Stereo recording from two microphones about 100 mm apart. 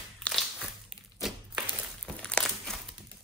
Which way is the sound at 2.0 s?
5° left (ahead or behind).